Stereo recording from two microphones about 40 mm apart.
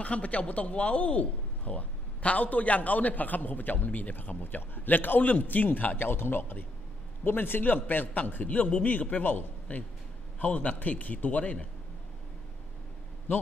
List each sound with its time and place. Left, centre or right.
0.0 s a man's voice: left